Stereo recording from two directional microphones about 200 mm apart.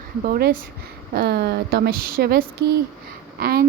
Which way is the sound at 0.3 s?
50° right (ahead or behind).